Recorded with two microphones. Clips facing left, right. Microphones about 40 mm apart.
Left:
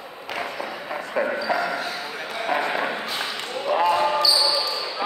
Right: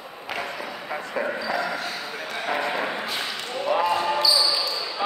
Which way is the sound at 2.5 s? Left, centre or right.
Left.